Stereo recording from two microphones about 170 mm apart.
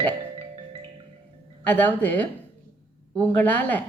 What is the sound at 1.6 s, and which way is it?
A woman's voice, 10° left (ahead or behind).